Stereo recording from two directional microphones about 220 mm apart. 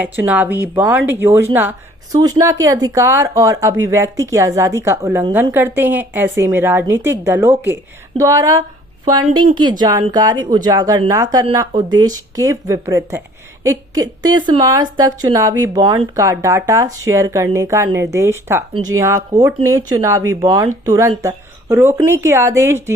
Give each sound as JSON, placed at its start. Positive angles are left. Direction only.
{"t": 0.3, "sound": "a woman's voice", "side_deg": -10}